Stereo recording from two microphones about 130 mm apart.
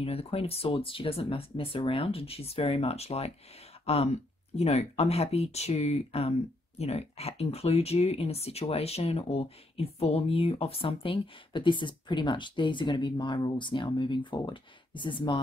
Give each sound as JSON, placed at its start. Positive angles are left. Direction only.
{"t": 0.0, "sound": "speech", "side_deg": 50}